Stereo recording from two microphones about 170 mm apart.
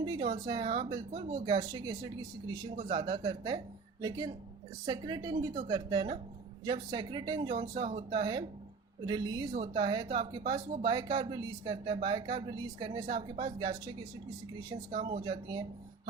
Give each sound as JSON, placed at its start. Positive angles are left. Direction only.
{"t": 0.0, "sound": "speech", "side_deg": -25}